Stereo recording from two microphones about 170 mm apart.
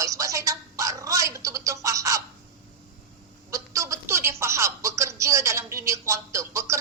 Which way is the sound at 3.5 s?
20° right (ahead or behind).